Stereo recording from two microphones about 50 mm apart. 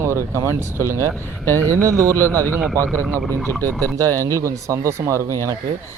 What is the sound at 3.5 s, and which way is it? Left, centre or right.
Speech, left.